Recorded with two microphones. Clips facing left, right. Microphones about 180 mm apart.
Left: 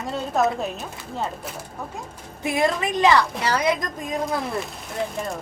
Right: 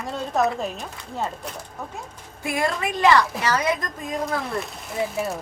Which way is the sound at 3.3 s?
Centre (ahead or behind).